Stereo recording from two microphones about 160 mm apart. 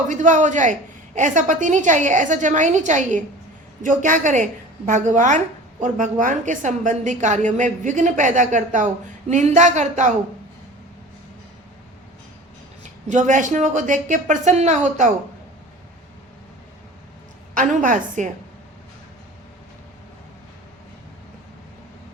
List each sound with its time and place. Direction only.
0.1 s a woman's voice: 50° right (ahead or behind)
12.8 s a woman's voice: 50° right (ahead or behind)
17.5 s a woman's voice: 55° right (ahead or behind)